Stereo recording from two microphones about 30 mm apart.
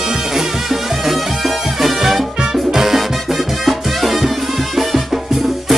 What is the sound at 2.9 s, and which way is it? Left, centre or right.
Music, centre.